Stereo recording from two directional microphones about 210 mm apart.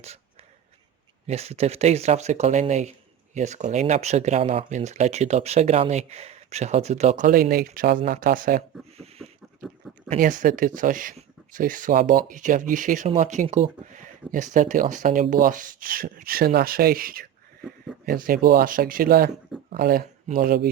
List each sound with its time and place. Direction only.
1.3 s speech: 30° right (ahead or behind)
9.0 s a sound: 30° right (ahead or behind)
10.1 s speech: 40° right (ahead or behind)